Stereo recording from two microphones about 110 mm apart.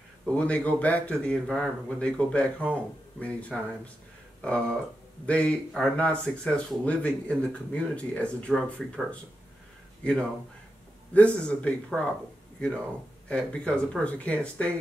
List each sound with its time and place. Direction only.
0.2 s speech: 10° left (ahead or behind)
5.2 s speech: 10° left (ahead or behind)
11.1 s speech: 10° left (ahead or behind)